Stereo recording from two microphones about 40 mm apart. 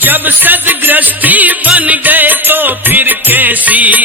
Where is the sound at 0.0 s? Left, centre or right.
Right.